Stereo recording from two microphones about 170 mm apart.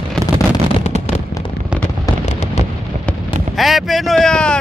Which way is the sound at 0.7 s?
40° left (ahead or behind).